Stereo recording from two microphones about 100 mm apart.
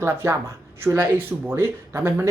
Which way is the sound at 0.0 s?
25° right (ahead or behind).